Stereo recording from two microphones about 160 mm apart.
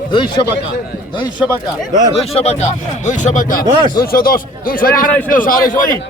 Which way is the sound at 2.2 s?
40° left (ahead or behind).